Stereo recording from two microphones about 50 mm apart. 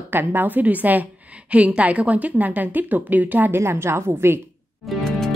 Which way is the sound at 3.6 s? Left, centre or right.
Right.